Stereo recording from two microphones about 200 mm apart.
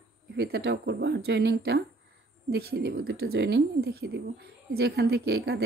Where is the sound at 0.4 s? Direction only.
55° right (ahead or behind).